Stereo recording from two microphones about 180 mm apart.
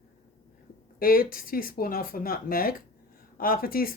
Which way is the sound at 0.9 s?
55° left (ahead or behind).